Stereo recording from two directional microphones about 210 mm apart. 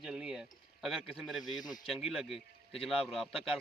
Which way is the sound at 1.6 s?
20° left (ahead or behind).